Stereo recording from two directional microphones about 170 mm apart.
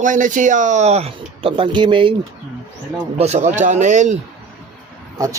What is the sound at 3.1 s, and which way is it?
Speech, 40° right (ahead or behind).